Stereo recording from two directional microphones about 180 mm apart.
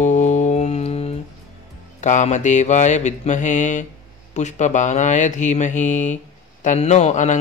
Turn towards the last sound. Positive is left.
turn(degrees=40)  # may be behind; listen again after turning